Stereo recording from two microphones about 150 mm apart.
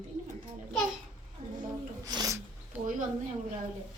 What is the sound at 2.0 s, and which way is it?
Sneeze, 25° right (ahead or behind).